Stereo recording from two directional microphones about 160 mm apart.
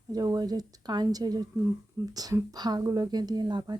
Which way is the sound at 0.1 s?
25° right (ahead or behind).